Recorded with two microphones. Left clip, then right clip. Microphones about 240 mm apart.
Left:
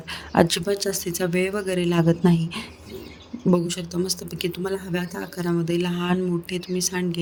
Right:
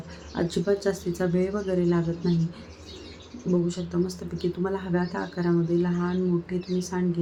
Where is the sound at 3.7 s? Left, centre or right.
Left.